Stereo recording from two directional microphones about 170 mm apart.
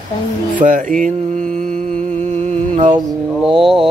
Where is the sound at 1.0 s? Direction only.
50° right (ahead or behind).